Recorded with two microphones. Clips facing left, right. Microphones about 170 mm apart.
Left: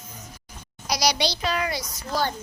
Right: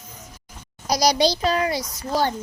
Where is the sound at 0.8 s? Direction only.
45° right (ahead or behind); by 2.3 s 30° right (ahead or behind).